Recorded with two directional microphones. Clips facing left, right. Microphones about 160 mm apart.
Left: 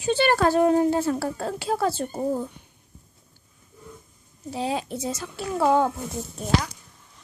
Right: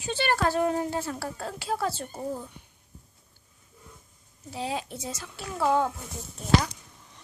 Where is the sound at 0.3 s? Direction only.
50° left (ahead or behind).